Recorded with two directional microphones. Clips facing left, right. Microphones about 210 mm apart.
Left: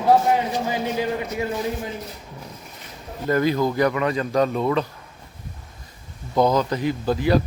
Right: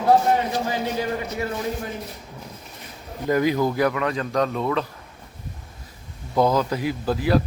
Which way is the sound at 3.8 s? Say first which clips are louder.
Left 2 dB; centre (ahead or behind).